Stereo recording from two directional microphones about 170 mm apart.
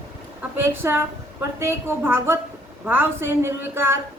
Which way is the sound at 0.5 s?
15° right (ahead or behind).